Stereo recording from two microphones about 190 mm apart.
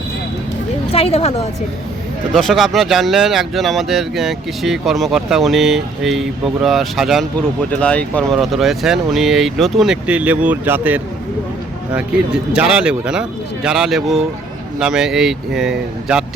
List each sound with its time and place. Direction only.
0.9 s a woman's voice: 30° left (ahead or behind)
2.3 s speech: centre (ahead or behind)